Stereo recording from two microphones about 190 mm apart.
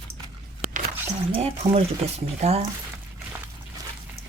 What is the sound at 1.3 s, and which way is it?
Speech, 35° right (ahead or behind).